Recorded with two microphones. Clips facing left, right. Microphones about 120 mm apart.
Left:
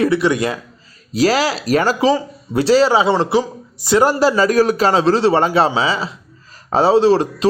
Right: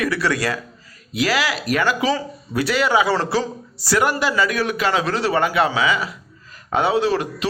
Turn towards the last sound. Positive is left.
turn(degrees=30)  # may be behind; listen again after turning